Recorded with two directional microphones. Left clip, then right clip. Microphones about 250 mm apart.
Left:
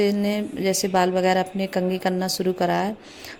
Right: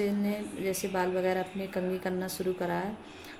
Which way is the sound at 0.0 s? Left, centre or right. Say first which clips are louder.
Left 9 dB; left.